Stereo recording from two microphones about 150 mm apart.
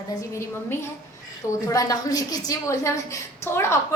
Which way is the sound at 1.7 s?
25° left (ahead or behind).